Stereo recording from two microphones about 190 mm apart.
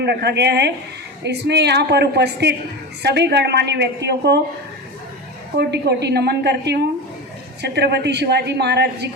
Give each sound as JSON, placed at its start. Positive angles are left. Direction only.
{"t": 0.0, "sound": "a woman's voice", "side_deg": -60}
{"t": 5.5, "sound": "a woman's voice", "side_deg": -60}